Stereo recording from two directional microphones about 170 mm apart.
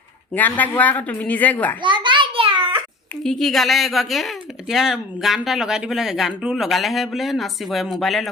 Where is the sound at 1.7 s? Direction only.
30° right (ahead or behind).